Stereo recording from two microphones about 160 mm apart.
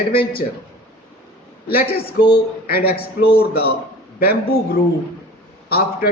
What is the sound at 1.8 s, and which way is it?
Speech, 70° left (ahead or behind).